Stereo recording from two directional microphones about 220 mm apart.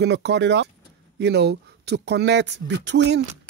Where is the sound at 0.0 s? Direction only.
50° right (ahead or behind).